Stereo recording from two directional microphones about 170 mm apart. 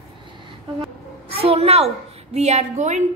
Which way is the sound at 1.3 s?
35° right (ahead or behind).